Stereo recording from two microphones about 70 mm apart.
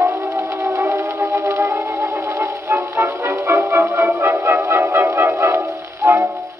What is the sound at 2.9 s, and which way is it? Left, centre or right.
Music, right.